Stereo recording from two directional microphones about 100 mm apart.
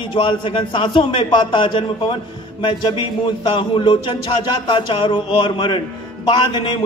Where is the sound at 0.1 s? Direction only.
60° left (ahead or behind).